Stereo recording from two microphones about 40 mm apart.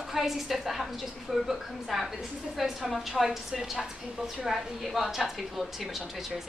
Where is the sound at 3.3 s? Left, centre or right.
Centre.